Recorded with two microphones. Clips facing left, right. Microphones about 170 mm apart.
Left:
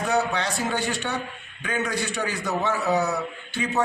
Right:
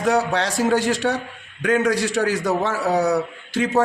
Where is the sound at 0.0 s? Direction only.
90° right.